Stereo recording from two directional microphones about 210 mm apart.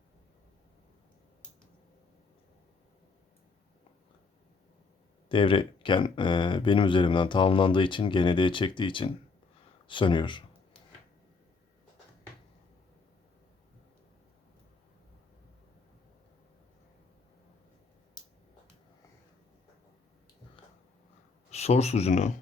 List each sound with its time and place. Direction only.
5.3 s speech: 25° left (ahead or behind)
21.5 s speech: 30° left (ahead or behind)